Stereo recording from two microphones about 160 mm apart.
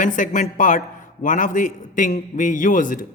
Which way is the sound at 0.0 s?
55° left (ahead or behind).